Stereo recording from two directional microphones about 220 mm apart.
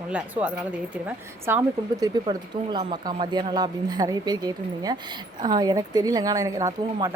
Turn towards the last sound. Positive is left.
turn(degrees=-15)  # may be behind; listen again after turning